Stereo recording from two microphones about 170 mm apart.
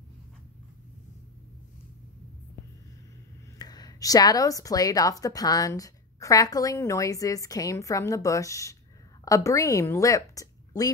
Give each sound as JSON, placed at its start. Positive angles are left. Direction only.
{"t": 3.5, "sound": "a woman's voice", "side_deg": 25}